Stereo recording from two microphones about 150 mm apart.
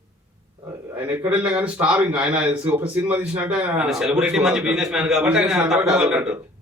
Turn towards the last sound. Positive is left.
turn(degrees=-5)  # may be behind; listen again after turning